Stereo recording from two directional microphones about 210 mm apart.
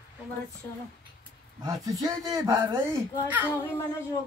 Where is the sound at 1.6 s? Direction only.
15° right (ahead or behind).